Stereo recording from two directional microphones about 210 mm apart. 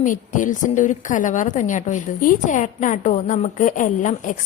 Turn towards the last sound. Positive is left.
turn(degrees=40)  # may be behind; listen again after turning